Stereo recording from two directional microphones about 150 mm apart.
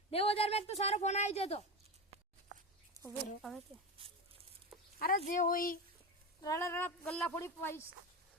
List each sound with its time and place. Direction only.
0.1 s a woman's voice: 40° left (ahead or behind)
4.0 s a sound: 35° right (ahead or behind)
4.9 s speech: 75° left (ahead or behind)
6.4 s a woman's voice: 20° left (ahead or behind)